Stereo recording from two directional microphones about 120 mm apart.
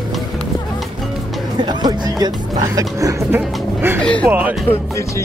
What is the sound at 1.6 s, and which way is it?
Speech, 35° right (ahead or behind).